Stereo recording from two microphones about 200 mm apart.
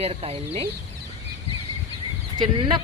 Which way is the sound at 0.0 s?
30° right (ahead or behind).